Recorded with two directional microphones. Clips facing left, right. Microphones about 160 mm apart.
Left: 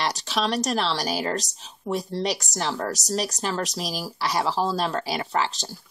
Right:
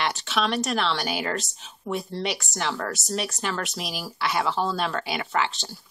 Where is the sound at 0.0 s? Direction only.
35° left (ahead or behind).